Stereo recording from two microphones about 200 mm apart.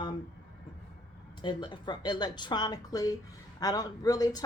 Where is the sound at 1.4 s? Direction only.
25° left (ahead or behind).